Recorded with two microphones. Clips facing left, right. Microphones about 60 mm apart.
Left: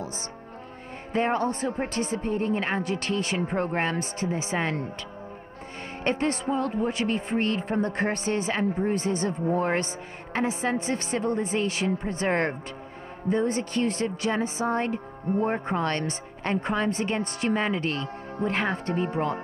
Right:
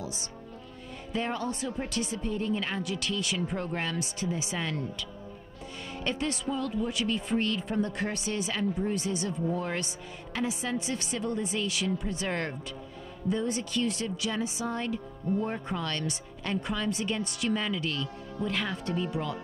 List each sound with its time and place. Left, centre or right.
1.1 s speech: left
6.0 s speech: left